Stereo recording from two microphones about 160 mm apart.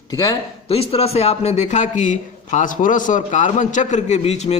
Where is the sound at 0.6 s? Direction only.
40° left (ahead or behind).